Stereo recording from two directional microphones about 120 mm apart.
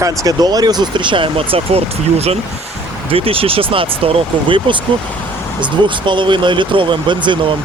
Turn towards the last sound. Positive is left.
turn(degrees=-40)  # may be behind; listen again after turning